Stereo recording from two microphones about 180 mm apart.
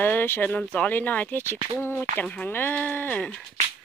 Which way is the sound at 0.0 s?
10° left (ahead or behind).